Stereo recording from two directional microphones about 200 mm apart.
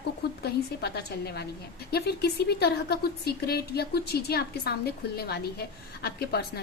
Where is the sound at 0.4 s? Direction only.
55° left (ahead or behind).